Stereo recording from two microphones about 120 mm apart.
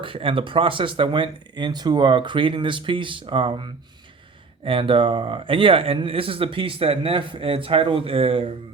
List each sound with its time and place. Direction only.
0.0 s speech: 50° right (ahead or behind)